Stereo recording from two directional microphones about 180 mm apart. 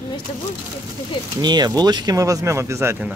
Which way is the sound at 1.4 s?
25° right (ahead or behind).